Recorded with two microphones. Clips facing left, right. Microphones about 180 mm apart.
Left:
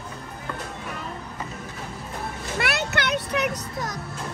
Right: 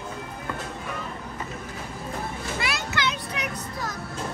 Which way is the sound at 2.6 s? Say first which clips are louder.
Left 4 dB; 60° left (ahead or behind).